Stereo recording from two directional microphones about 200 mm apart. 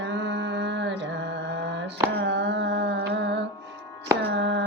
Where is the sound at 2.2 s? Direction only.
60° right (ahead or behind).